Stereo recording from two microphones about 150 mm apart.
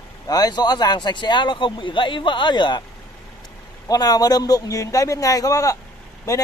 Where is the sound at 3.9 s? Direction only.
25° left (ahead or behind).